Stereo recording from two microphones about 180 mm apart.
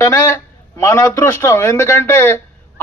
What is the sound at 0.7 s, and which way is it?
A man's voice, 15° left (ahead or behind).